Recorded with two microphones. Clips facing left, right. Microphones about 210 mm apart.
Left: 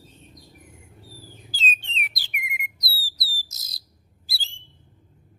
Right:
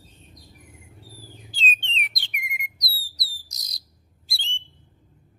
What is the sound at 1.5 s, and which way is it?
Bird, centre (ahead or behind).